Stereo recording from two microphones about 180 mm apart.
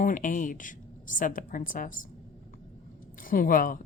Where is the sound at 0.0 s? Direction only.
45° left (ahead or behind).